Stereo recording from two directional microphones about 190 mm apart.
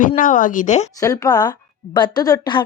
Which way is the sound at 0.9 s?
20° left (ahead or behind).